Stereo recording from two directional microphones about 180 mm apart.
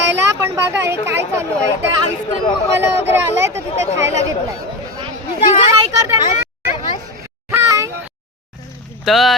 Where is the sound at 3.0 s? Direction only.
15° right (ahead or behind).